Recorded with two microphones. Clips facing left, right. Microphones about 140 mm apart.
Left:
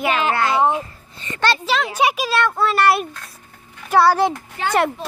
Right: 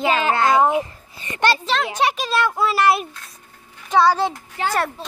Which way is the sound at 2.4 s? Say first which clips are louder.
Left 1 dB; 5° right (ahead or behind).